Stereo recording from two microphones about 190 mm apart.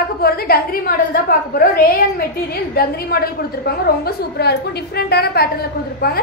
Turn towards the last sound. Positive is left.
turn(degrees=55)  # may be behind; listen again after turning